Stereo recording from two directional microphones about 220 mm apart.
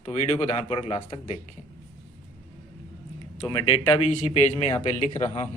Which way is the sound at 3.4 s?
25° left (ahead or behind).